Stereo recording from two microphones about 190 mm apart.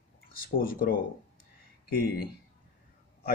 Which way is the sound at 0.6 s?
50° left (ahead or behind).